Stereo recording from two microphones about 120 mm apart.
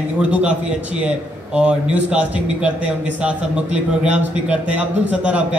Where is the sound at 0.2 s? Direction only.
10° right (ahead or behind).